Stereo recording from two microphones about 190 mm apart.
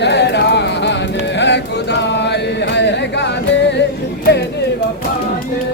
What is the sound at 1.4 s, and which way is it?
Chant, 65° left (ahead or behind).